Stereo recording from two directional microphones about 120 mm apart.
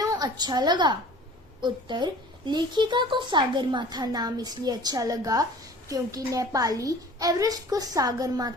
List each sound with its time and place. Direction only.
0.0 s a woman's voice: 30° right (ahead or behind)